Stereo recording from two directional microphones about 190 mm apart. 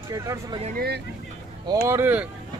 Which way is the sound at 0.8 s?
60° right (ahead or behind).